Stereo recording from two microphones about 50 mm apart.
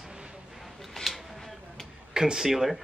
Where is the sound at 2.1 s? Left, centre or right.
Centre.